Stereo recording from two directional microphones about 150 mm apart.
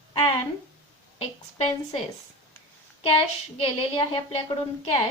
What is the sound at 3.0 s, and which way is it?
A woman's voice, 35° left (ahead or behind).